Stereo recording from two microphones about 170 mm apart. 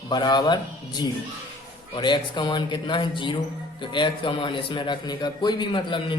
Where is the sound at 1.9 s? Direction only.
25° left (ahead or behind).